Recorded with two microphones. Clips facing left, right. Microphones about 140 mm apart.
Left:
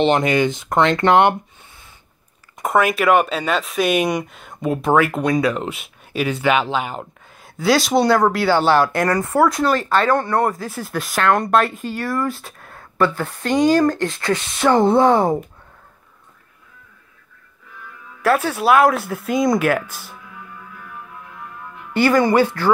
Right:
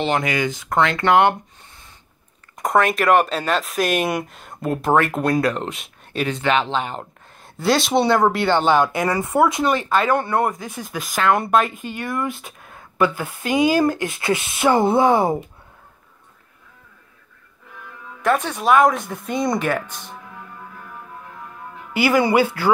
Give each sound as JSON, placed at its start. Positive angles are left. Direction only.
{"t": 0.0, "sound": "speech", "side_deg": 25}
{"t": 2.6, "sound": "speech", "side_deg": 5}
{"t": 10.7, "sound": "speech", "side_deg": 0}
{"t": 12.0, "sound": "speech", "side_deg": -20}
{"t": 12.4, "sound": "a sound", "side_deg": 0}
{"t": 13.1, "sound": "speech", "side_deg": -5}
{"t": 18.2, "sound": "speech", "side_deg": 5}
{"t": 21.9, "sound": "speech", "side_deg": -10}